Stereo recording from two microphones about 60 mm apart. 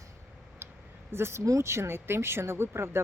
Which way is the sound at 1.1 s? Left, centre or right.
Right.